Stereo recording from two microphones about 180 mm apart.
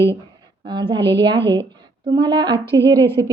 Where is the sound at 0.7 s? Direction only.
25° right (ahead or behind).